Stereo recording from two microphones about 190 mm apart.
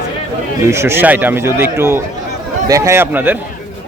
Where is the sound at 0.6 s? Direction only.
15° right (ahead or behind).